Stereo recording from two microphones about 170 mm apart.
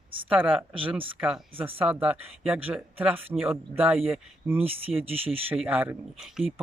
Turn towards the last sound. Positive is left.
turn(degrees=-5)  # may be behind; listen again after turning